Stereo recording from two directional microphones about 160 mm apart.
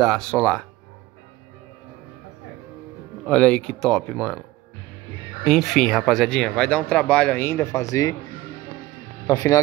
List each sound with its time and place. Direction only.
0.0 s speech: centre (ahead or behind)
3.3 s speech: 5° left (ahead or behind)
5.4 s speech: centre (ahead or behind); by 8.2 s 20° left (ahead or behind)
9.3 s speech: 20° left (ahead or behind)